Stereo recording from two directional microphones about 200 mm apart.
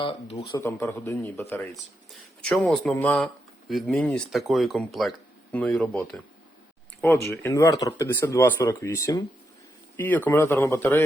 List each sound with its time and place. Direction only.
0.0 s speech: 25° left (ahead or behind)
0.6 s speech: 10° left (ahead or behind)